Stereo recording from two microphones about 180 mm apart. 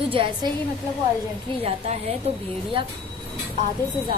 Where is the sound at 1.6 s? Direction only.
35° right (ahead or behind).